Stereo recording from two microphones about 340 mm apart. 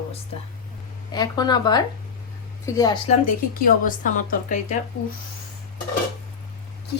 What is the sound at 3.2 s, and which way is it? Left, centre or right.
Speech, left.